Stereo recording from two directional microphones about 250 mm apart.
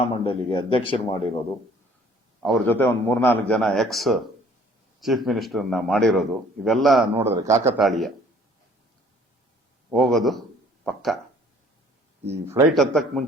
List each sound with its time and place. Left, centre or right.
0.1 s speech: centre
2.4 s a man's voice: centre
7.8 s a man's voice: centre
9.9 s a man's voice: centre
12.5 s speech: centre
12.7 s a man's voice: centre